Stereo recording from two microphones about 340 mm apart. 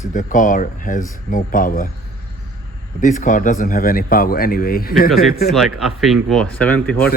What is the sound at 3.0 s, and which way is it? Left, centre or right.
Speech, left.